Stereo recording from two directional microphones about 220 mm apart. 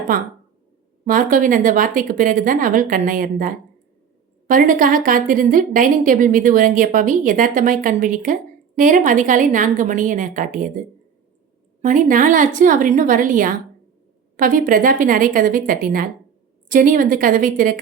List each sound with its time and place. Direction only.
0.1 s a woman's voice: 40° right (ahead or behind)
11.8 s a woman's voice: 35° right (ahead or behind)